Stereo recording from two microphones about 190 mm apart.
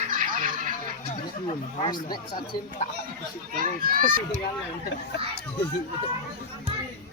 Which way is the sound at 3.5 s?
45° right (ahead or behind).